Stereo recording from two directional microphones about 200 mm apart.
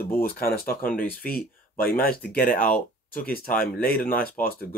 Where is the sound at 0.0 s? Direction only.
50° left (ahead or behind).